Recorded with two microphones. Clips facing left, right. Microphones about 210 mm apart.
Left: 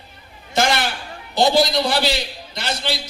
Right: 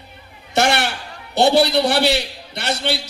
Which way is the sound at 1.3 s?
65° right (ahead or behind).